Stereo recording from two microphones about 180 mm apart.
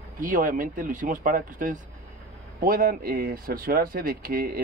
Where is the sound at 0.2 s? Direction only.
50° right (ahead or behind).